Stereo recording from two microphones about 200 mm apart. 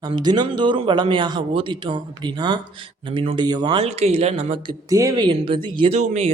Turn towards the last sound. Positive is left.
turn(degrees=-35)  # may be behind; listen again after turning